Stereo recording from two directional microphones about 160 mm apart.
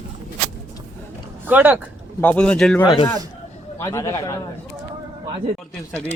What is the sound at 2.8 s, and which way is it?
Speech, 35° left (ahead or behind).